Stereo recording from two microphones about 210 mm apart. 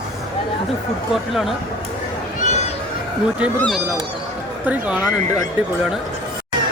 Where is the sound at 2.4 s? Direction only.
35° left (ahead or behind).